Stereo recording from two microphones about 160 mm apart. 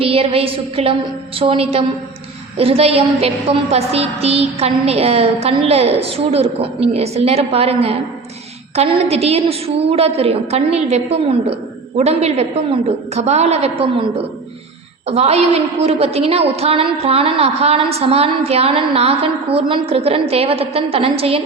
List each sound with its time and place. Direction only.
0.0 s a woman's voice: 35° right (ahead or behind)
15.0 s a woman's voice: 40° right (ahead or behind)